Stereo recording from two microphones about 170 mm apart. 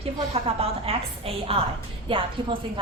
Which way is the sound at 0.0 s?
35° right (ahead or behind).